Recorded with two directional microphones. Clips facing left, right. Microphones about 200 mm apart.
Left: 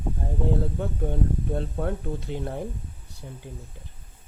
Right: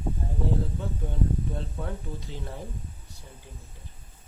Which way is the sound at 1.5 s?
55° left (ahead or behind).